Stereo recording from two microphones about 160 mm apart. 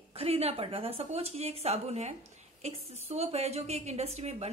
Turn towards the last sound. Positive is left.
turn(degrees=-40)  # may be behind; listen again after turning